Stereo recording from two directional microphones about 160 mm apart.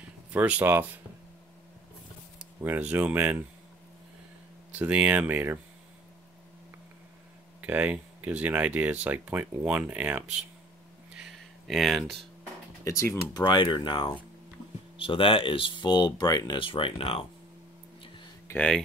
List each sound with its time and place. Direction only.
0.3 s speech: 10° right (ahead or behind)
2.6 s speech: 10° right (ahead or behind)
4.7 s speech: 10° right (ahead or behind)
7.6 s speech: 10° right (ahead or behind)
11.1 s a sound: centre (ahead or behind)
12.8 s speech: 20° left (ahead or behind)
18.5 s speech: 5° left (ahead or behind)